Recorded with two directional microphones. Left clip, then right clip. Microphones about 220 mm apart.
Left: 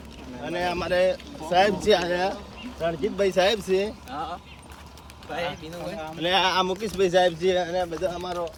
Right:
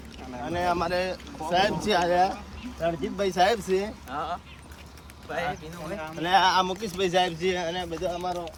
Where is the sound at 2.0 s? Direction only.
10° right (ahead or behind).